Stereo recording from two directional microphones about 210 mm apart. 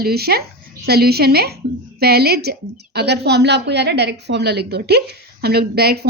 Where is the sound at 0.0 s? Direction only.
50° right (ahead or behind).